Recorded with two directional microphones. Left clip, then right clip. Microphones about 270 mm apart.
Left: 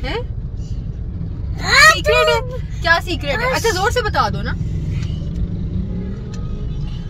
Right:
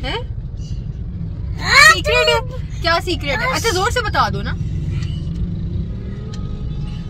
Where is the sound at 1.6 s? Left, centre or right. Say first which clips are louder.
Right 2 dB; centre.